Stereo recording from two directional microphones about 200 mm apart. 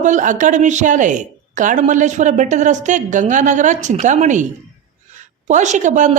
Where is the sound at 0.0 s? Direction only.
40° right (ahead or behind).